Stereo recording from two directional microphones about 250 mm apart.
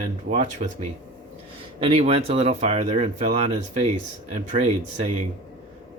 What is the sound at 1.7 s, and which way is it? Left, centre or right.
Speech, right.